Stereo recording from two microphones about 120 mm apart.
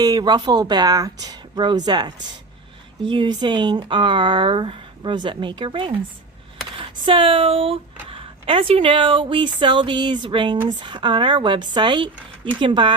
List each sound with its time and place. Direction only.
0.0 s speech: 35° right (ahead or behind)